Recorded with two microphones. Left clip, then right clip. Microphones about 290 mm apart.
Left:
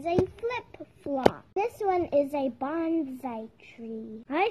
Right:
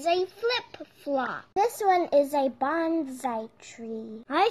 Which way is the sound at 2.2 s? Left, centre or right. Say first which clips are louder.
Right 4 dB; right.